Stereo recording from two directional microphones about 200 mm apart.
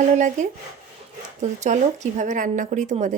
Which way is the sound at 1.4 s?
35° right (ahead or behind).